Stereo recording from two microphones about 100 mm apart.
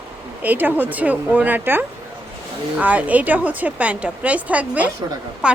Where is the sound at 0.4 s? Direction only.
20° right (ahead or behind).